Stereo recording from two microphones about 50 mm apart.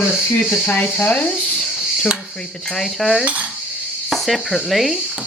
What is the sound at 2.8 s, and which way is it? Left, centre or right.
Cutlery, centre.